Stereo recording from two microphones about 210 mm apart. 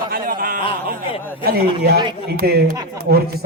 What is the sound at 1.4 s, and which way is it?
Speech, 45° right (ahead or behind).